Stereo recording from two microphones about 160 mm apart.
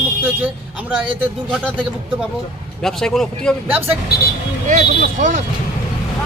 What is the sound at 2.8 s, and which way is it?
Speech, 5° left (ahead or behind).